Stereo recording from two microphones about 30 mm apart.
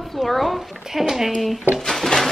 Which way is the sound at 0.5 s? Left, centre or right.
Centre.